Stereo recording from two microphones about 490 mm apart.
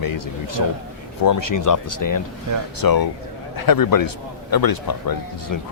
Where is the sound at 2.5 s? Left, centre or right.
Right.